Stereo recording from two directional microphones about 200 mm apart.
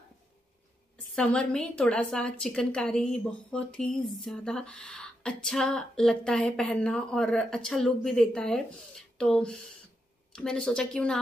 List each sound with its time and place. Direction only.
1.1 s a woman's voice: 5° left (ahead or behind)